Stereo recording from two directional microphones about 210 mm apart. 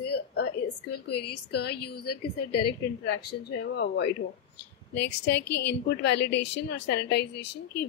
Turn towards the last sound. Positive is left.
turn(degrees=55)  # may be behind; listen again after turning